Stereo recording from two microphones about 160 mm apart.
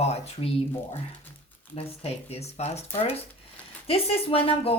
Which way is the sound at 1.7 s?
40° left (ahead or behind).